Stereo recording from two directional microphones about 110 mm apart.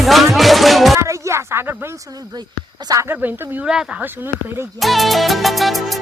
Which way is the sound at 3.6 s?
5° right (ahead or behind).